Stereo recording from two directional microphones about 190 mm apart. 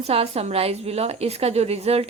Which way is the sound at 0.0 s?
30° right (ahead or behind).